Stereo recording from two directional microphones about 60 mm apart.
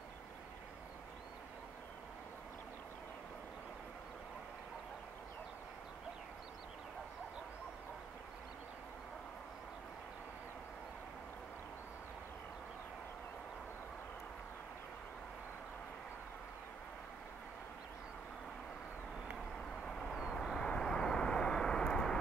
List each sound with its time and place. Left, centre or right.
19.5 s vehicle: centre
20.1 s vehicle: centre
20.5 s vehicle: centre